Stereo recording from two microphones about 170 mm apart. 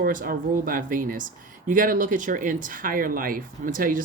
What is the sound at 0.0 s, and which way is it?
Speech, 55° right (ahead or behind).